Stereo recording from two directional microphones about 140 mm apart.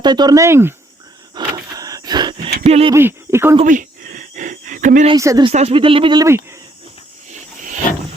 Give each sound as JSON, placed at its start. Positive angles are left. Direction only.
{"t": 0.0, "sound": "speech", "side_deg": -30}
{"t": 1.4, "sound": "a sound", "side_deg": -30}
{"t": 2.6, "sound": "speech", "side_deg": -45}
{"t": 2.9, "sound": "speech", "side_deg": -15}
{"t": 3.6, "sound": "a sound", "side_deg": -65}
{"t": 5.1, "sound": "speech", "side_deg": -25}
{"t": 5.5, "sound": "speech", "side_deg": -45}
{"t": 6.1, "sound": "speech", "side_deg": -20}
{"t": 7.3, "sound": "wild animals", "side_deg": -65}